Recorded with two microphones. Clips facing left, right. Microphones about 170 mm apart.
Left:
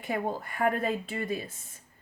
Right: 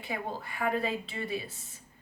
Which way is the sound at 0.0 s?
50° left (ahead or behind).